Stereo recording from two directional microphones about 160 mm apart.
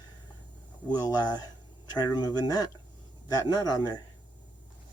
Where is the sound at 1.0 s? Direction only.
25° left (ahead or behind).